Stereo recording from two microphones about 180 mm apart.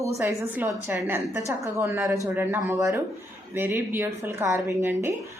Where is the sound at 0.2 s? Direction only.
15° right (ahead or behind).